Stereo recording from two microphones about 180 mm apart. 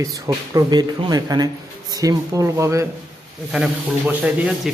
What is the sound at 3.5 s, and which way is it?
Speech, 5° right (ahead or behind).